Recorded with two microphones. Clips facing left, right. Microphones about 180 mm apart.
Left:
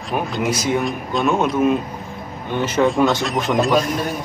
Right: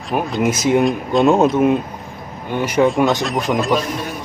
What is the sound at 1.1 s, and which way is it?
Speech, 25° right (ahead or behind).